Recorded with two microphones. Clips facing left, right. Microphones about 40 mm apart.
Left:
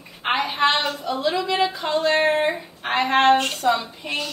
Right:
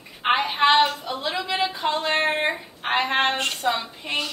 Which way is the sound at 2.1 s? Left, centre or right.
Centre.